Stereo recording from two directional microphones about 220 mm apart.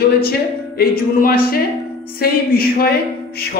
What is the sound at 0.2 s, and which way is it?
Speech, 45° left (ahead or behind).